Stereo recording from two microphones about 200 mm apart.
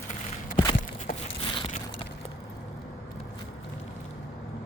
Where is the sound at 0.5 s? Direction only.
25° left (ahead or behind).